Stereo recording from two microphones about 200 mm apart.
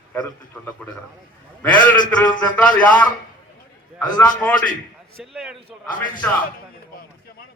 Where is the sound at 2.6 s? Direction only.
5° left (ahead or behind).